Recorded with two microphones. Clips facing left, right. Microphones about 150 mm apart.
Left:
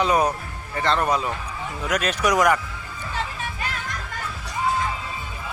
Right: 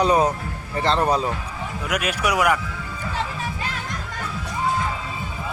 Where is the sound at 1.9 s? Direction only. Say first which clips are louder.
Left 2 dB; 10° right (ahead or behind).